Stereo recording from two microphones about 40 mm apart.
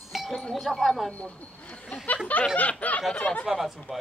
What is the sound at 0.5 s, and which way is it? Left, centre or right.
Speech, centre.